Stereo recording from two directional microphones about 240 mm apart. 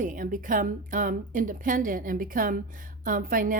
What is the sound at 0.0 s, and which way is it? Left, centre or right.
A woman's voice, right.